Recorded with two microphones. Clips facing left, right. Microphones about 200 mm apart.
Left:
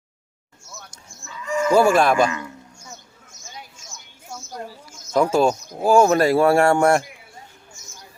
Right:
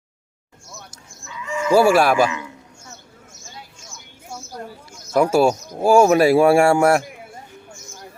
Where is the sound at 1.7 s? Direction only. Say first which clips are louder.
Right 2 dB; 10° right (ahead or behind).